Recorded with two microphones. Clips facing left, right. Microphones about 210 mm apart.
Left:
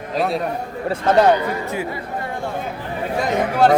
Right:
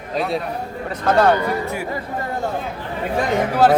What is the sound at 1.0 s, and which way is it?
Speech, 20° left (ahead or behind).